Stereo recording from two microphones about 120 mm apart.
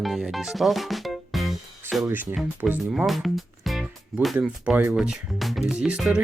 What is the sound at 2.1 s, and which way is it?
Speech, 15° right (ahead or behind).